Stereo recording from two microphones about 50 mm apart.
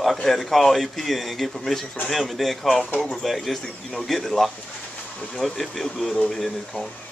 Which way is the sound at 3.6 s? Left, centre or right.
Centre.